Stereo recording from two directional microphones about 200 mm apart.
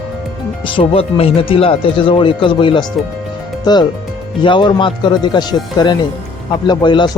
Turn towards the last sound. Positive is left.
turn(degrees=20)  # may be behind; listen again after turning